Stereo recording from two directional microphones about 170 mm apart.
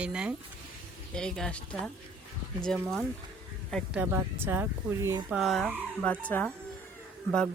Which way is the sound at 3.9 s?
15° right (ahead or behind).